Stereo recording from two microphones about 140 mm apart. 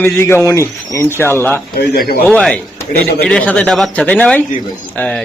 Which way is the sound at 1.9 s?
90° left.